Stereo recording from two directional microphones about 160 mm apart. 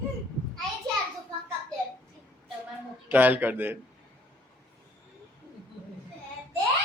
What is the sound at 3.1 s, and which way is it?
Speech, 10° right (ahead or behind).